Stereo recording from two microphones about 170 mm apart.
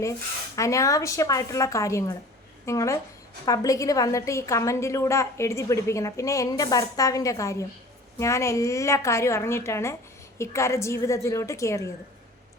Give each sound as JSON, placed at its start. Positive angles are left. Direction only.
{"t": 0.5, "sound": "a woman's voice", "side_deg": 20}